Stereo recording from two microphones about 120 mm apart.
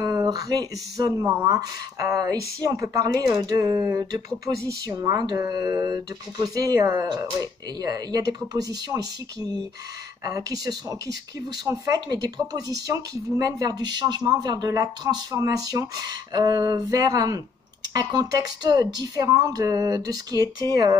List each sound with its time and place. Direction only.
0.0 s speech: 30° right (ahead or behind)